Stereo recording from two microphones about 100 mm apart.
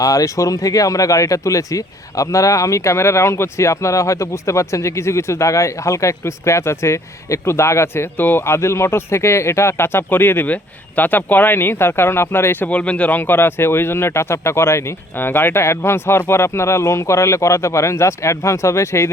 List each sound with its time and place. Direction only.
0.0 s speech: 35° left (ahead or behind)